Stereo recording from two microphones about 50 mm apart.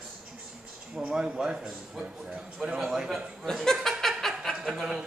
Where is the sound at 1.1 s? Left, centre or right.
Centre.